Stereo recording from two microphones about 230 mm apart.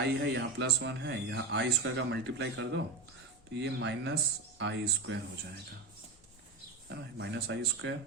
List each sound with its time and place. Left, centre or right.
0.0 s speech: right
6.9 s speech: right